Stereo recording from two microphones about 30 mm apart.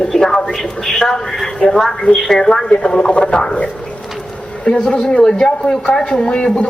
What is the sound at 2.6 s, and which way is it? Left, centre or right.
Speech, left.